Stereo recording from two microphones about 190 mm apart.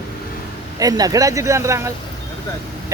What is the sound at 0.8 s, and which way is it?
Speech, 20° right (ahead or behind).